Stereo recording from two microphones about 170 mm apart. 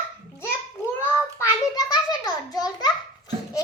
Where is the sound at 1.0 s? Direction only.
20° left (ahead or behind).